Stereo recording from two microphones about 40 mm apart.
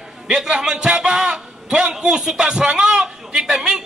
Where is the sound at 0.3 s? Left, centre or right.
Centre.